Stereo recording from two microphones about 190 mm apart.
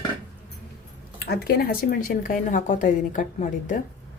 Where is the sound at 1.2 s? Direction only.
55° left (ahead or behind).